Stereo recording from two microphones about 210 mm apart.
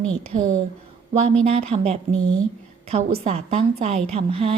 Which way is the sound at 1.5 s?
30° right (ahead or behind).